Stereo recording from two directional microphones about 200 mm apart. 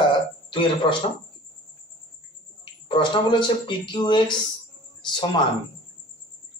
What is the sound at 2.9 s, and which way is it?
Speech, 25° left (ahead or behind).